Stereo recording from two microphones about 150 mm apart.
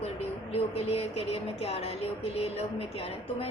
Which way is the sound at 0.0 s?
45° left (ahead or behind).